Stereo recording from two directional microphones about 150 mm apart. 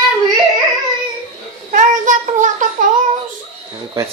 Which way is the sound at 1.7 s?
60° right (ahead or behind).